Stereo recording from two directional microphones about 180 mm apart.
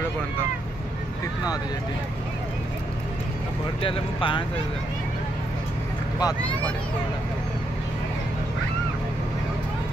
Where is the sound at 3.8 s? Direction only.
30° left (ahead or behind).